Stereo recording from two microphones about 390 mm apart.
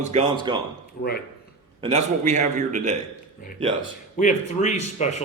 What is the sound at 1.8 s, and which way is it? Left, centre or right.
A man's voice, centre.